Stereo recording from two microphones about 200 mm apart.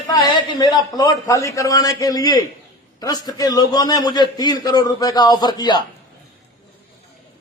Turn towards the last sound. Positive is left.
turn(degrees=20)  # may be behind; listen again after turning